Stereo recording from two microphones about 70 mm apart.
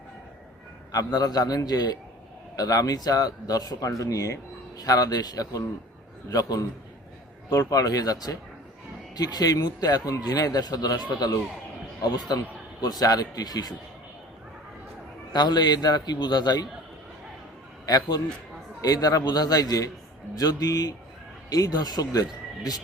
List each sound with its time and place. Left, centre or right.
0.9 s speech: left
15.3 s a man's voice: left
17.8 s speech: left